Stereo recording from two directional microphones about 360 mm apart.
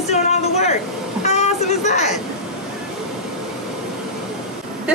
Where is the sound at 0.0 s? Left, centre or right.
Centre.